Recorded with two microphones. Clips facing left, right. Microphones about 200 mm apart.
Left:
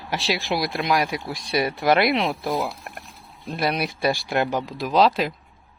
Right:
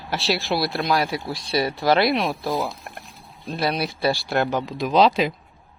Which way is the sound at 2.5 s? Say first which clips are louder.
Even; centre (ahead or behind).